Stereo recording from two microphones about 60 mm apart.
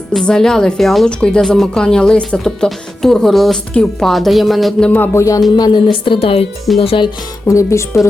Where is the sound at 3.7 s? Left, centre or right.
Centre.